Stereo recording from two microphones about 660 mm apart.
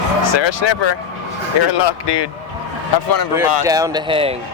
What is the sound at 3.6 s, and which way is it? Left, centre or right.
Speech, centre.